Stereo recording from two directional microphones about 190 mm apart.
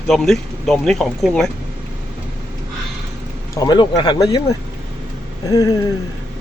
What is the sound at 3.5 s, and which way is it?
Speech, 20° left (ahead or behind).